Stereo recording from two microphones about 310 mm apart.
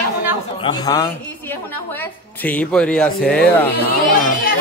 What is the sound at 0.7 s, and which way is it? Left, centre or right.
Speech, centre.